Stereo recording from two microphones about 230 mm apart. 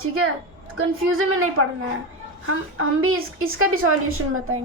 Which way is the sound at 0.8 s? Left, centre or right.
Right.